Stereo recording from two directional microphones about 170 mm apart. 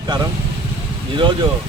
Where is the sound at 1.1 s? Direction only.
30° right (ahead or behind).